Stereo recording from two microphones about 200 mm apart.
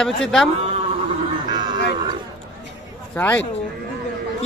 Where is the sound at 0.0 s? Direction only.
Centre (ahead or behind).